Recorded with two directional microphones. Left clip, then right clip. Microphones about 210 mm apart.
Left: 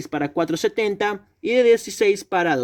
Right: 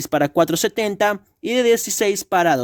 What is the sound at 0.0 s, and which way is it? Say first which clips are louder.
Speech: right 6 dB; 55° right (ahead or behind).